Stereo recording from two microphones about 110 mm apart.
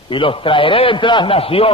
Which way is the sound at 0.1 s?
50° left (ahead or behind).